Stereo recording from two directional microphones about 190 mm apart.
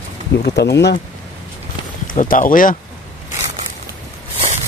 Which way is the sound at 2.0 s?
45° left (ahead or behind).